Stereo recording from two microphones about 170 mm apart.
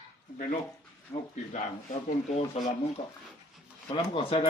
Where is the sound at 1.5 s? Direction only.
45° left (ahead or behind).